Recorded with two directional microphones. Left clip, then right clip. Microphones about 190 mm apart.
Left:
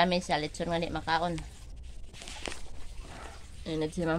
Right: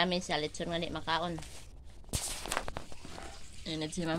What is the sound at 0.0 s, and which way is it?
Speech, 15° left (ahead or behind).